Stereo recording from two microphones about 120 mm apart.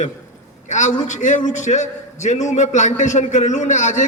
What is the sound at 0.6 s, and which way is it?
A man's voice, 90° left.